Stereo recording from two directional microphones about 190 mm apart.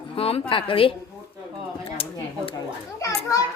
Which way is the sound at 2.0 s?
30° left (ahead or behind).